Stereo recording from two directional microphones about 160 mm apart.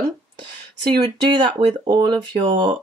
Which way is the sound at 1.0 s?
25° right (ahead or behind).